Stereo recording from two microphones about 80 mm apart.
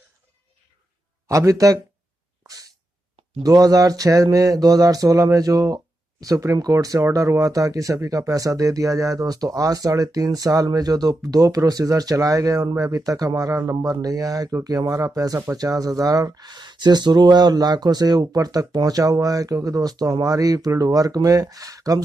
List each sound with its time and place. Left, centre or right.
1.2 s speech: right
2.4 s sneeze: right
3.4 s speech: right